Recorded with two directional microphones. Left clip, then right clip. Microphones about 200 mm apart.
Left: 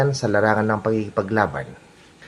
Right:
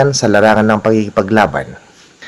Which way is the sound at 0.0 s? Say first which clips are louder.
Right 9 dB; 40° right (ahead or behind).